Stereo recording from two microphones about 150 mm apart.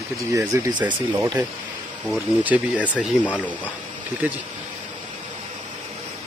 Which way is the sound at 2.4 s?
10° right (ahead or behind).